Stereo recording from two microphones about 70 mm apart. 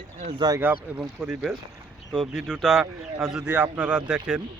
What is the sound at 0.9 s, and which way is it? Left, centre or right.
Speech, centre.